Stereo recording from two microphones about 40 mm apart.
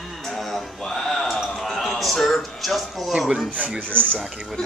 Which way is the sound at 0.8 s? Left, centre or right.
Centre.